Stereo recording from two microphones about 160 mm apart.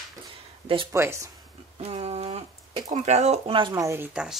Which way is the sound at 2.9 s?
45° right (ahead or behind).